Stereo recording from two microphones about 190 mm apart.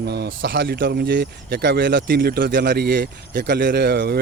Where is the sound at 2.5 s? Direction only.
65° right (ahead or behind).